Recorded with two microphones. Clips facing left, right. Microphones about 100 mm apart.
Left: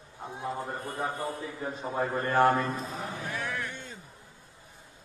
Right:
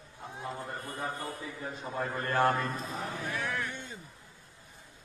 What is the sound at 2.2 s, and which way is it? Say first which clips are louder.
Speech: left 4 dB; 5° left (ahead or behind).